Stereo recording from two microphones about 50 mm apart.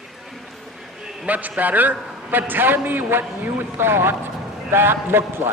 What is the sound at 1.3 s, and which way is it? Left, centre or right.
A man's voice, right.